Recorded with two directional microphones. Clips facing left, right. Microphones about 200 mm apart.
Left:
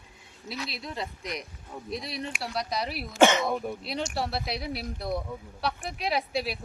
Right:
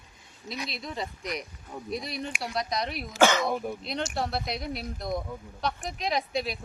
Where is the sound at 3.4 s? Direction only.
Centre (ahead or behind).